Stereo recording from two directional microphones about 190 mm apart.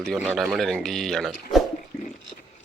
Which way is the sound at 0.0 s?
Centre (ahead or behind).